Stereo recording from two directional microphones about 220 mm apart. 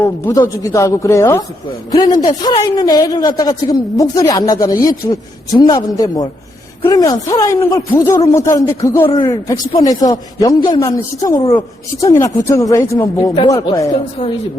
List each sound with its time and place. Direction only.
0.0 s a woman's voice: 10° left (ahead or behind)